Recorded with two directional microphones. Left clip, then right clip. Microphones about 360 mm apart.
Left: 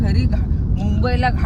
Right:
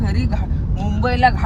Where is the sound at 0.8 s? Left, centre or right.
Centre.